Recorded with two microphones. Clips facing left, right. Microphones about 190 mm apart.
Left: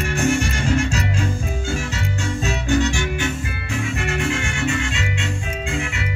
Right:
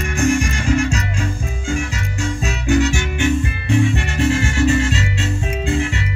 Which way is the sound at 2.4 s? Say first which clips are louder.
Right 3 dB; centre (ahead or behind).